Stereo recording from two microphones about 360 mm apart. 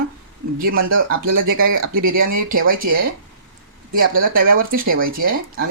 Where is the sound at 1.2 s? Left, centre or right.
Right.